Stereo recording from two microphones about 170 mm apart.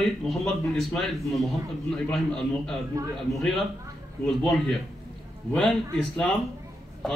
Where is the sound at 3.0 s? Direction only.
20° right (ahead or behind).